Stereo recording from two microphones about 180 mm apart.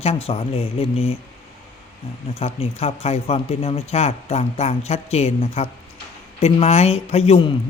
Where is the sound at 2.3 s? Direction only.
35° left (ahead or behind).